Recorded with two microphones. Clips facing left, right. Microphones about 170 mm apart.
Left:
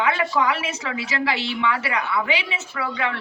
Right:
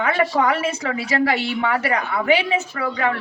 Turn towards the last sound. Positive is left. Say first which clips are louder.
# right 4 dB
turn(degrees=-45)  # may be behind; listen again after turning